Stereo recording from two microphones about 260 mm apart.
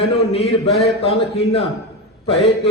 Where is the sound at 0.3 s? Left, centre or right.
Left.